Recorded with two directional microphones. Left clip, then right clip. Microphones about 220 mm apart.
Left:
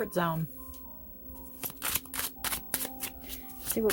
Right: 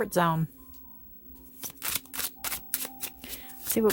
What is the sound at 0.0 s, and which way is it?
Speech, 35° right (ahead or behind).